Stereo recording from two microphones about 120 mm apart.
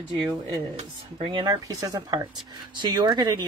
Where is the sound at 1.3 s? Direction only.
35° right (ahead or behind).